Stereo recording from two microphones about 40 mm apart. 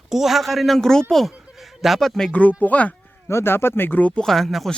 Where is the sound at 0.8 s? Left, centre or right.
Centre.